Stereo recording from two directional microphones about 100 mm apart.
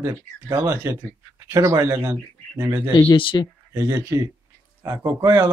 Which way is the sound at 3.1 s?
55° left (ahead or behind).